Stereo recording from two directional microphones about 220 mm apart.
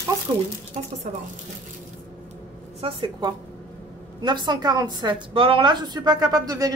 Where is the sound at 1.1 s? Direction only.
35° right (ahead or behind).